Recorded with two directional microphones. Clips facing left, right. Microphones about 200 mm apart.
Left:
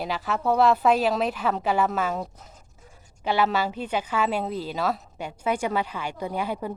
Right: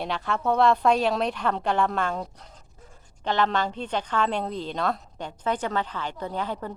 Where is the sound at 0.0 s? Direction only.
5° left (ahead or behind).